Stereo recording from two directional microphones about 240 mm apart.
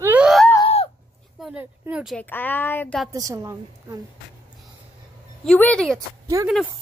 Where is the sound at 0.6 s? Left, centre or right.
Left.